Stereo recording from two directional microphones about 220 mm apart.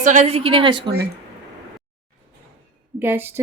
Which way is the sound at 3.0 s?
10° right (ahead or behind).